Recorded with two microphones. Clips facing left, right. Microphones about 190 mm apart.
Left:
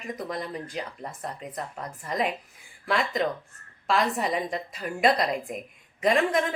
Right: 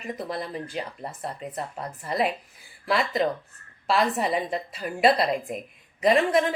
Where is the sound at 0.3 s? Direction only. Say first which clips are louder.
Right 1 dB; 30° right (ahead or behind).